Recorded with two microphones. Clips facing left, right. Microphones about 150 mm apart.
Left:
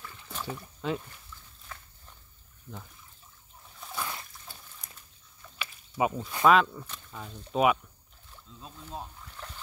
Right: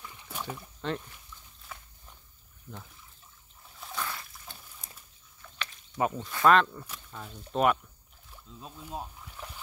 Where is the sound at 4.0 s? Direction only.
15° left (ahead or behind).